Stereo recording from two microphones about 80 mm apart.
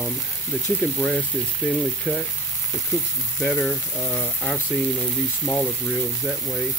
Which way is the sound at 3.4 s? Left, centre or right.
Centre.